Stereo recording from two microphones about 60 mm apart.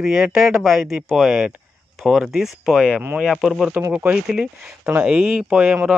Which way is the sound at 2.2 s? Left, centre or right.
Centre.